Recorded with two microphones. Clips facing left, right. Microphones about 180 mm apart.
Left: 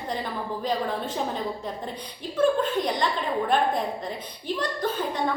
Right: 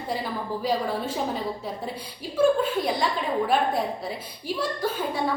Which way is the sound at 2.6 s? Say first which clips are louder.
Even; 5° right (ahead or behind).